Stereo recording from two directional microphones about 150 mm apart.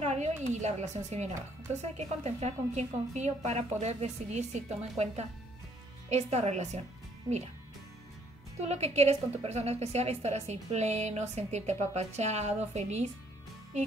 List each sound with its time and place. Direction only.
0.0 s speech: 50° right (ahead or behind)
8.5 s speech: 45° right (ahead or behind)